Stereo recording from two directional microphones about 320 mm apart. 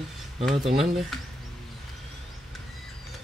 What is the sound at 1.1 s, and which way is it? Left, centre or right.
Speech, centre.